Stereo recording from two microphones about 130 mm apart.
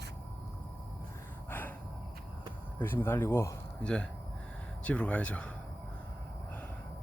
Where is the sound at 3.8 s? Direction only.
10° left (ahead or behind).